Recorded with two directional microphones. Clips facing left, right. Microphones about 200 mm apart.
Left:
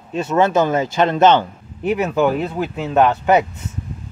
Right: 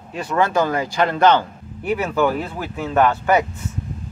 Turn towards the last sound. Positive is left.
turn(degrees=20)  # may be behind; listen again after turning